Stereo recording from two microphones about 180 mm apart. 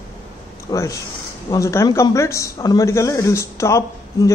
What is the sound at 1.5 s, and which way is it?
A woman's voice, 15° left (ahead or behind).